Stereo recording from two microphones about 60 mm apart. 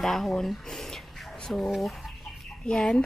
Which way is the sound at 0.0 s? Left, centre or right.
Centre.